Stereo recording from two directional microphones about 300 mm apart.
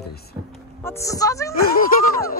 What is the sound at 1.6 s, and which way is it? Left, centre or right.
Speech, left.